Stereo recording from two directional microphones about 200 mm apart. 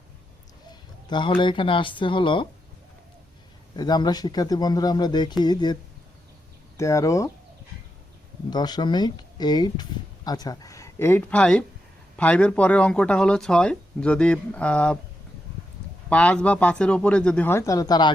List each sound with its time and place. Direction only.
0.7 s speech: 25° left (ahead or behind)
3.8 s speech: 20° left (ahead or behind)
6.7 s a man's voice: 15° left (ahead or behind)
8.4 s a man's voice: 20° left (ahead or behind)
16.0 s a man's voice: 5° left (ahead or behind)